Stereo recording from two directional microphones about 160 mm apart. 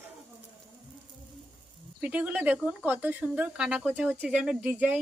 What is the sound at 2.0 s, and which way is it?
Speech, 10° right (ahead or behind).